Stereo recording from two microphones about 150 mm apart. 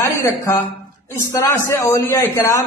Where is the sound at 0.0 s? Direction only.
20° left (ahead or behind).